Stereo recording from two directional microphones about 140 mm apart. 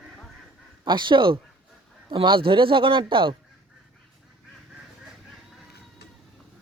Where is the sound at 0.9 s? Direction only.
35° right (ahead or behind).